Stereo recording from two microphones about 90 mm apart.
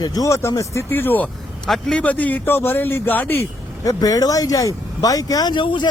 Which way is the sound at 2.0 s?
15° left (ahead or behind).